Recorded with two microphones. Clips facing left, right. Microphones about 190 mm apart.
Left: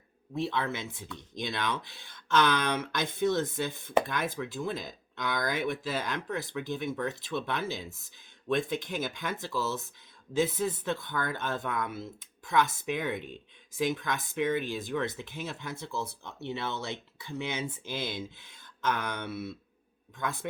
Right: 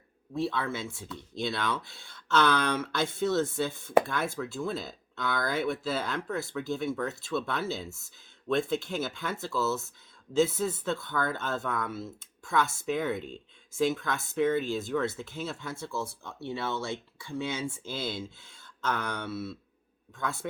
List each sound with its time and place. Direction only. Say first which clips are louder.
0.3 s speech: right 1 dB; 20° left (ahead or behind)